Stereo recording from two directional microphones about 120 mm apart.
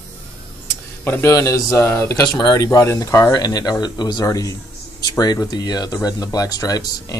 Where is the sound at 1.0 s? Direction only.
20° left (ahead or behind).